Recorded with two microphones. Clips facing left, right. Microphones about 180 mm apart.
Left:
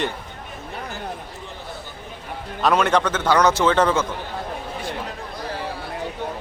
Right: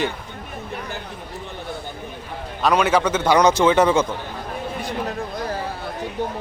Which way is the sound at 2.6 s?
Centre (ahead or behind).